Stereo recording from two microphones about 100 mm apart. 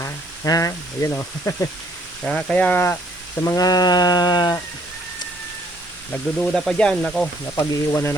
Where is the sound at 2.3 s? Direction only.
10° left (ahead or behind).